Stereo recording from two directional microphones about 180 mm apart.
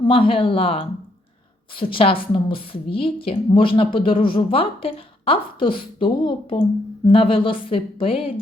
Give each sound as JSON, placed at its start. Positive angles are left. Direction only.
{"t": 0.0, "sound": "a woman's voice", "side_deg": 30}